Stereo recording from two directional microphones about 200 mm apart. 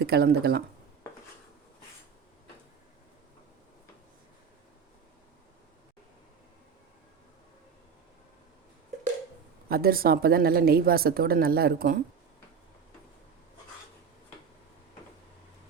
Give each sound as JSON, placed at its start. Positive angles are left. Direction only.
{"t": 0.0, "sound": "a woman's voice", "side_deg": -55}
{"t": 9.6, "sound": "a woman's voice", "side_deg": -50}